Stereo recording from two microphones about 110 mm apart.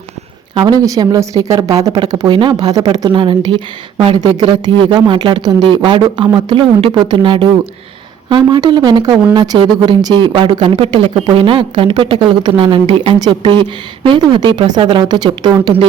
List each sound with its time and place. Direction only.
0.6 s speech: 35° right (ahead or behind); by 4.2 s 55° right (ahead or behind)
4.2 s speech: 35° right (ahead or behind)
4.8 s speech: 45° right (ahead or behind)